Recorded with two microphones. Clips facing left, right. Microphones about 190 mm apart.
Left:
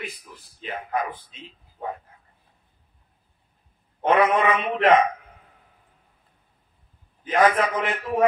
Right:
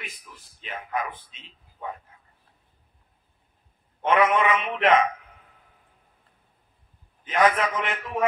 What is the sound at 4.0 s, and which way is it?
A man's voice, 35° left (ahead or behind).